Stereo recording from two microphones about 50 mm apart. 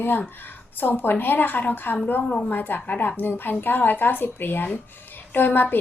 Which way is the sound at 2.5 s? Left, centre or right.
Left.